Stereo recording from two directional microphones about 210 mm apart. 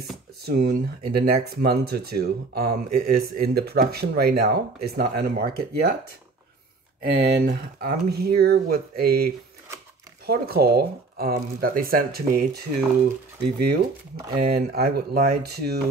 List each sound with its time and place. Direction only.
0.5 s speech: 45° right (ahead or behind)
7.0 s speech: 45° right (ahead or behind)
14.4 s speech: 50° right (ahead or behind)